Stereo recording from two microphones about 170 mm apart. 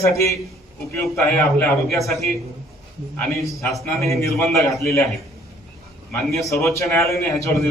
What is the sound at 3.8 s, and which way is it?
Speech, 15° left (ahead or behind).